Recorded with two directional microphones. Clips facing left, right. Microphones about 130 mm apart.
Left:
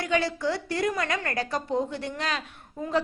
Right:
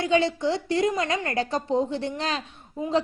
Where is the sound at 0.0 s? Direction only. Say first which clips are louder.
Right 4 dB; 25° right (ahead or behind).